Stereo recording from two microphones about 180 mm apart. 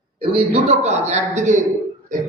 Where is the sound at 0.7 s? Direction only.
40° right (ahead or behind).